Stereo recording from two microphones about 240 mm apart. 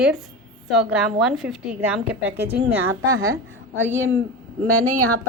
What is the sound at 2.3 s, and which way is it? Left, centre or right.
Speech, right.